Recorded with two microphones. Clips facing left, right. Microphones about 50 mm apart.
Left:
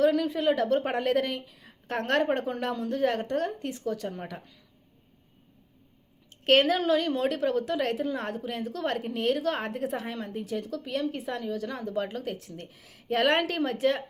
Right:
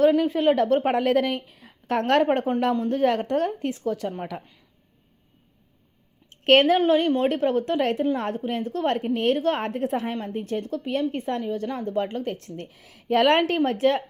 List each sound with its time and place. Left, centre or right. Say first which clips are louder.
0.0 s a woman's voice: right 5 dB; right
4.3 s speech: right 6 dB; right
6.4 s a woman's voice: right 5 dB; right
8.3 s a woman's voice: right 6 dB; right
8.7 s a woman's voice: right 7 dB; right
10.7 s a woman's voice: right 5 dB; right
13.0 s a woman's voice: right 5 dB; right